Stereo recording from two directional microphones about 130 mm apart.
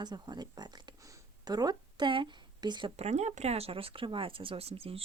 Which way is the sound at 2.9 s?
60° right (ahead or behind).